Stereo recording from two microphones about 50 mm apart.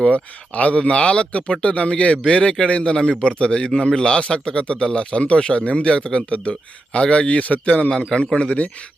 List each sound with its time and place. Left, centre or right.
0.0 s speech: left
7.9 s a man's voice: centre
8.4 s speech: left